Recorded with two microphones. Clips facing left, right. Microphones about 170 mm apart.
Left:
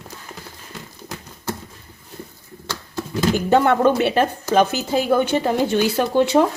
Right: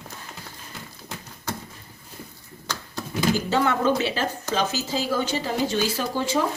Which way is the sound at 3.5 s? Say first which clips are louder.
Left 9 dB; 55° left (ahead or behind).